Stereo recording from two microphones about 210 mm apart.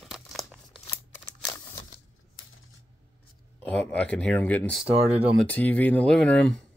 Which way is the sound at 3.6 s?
5° left (ahead or behind).